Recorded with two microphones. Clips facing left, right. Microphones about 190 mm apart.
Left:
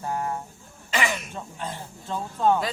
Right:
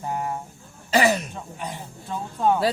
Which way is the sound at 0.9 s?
35° right (ahead or behind).